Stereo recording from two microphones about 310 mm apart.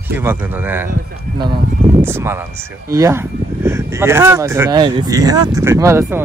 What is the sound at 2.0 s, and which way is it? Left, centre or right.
Speech, centre.